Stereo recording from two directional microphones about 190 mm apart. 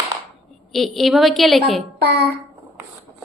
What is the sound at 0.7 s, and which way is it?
Speech, centre (ahead or behind).